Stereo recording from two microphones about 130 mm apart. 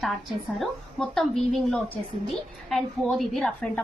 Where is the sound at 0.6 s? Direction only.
Centre (ahead or behind).